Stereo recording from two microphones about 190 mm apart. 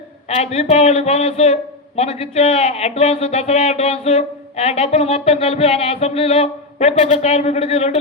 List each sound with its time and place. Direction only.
0.3 s speech: 35° left (ahead or behind)